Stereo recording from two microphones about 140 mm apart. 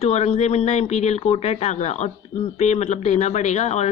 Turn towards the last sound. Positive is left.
turn(degrees=50)  # may be behind; listen again after turning